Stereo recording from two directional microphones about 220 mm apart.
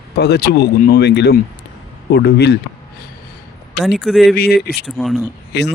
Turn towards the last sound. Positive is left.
turn(degrees=50)  # may be behind; listen again after turning